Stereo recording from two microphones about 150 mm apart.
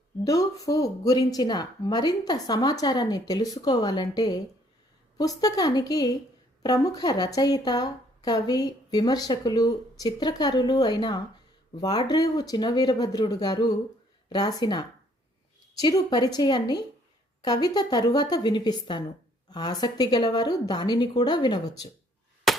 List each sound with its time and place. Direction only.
0.3 s speech: 25° left (ahead or behind)
22.5 s chop: centre (ahead or behind)